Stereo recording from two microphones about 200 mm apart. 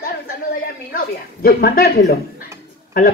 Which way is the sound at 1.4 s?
50° left (ahead or behind).